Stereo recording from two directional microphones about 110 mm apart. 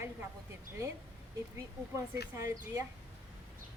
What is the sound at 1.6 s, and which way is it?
Speech, 25° right (ahead or behind).